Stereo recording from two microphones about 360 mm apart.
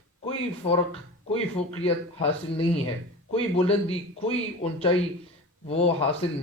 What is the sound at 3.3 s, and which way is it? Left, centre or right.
A man's voice, centre.